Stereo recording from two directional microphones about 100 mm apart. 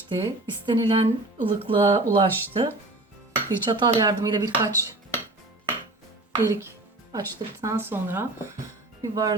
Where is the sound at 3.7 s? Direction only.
45° right (ahead or behind).